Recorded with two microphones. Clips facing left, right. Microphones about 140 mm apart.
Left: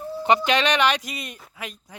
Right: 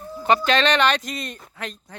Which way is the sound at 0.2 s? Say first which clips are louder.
Right 1 dB; 20° left (ahead or behind).